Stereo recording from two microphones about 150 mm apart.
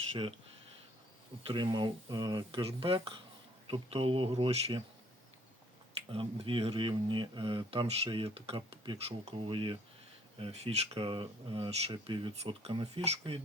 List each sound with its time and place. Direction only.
1.5 s speech: 30° right (ahead or behind)
6.1 s speech: 40° right (ahead or behind)
12.3 s speech: 45° right (ahead or behind)